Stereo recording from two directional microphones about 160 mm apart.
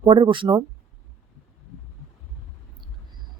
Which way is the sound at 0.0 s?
35° right (ahead or behind).